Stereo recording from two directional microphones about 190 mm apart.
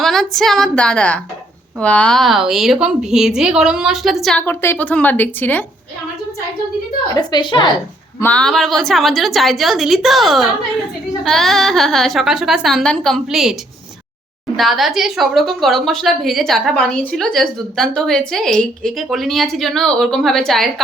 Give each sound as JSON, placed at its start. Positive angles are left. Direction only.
{"t": 0.0, "sound": "speech", "side_deg": 0}
{"t": 7.1, "sound": "a woman's voice", "side_deg": 20}
{"t": 8.2, "sound": "speech", "side_deg": 5}